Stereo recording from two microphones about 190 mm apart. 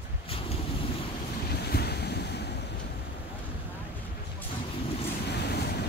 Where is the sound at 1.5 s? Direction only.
55° left (ahead or behind).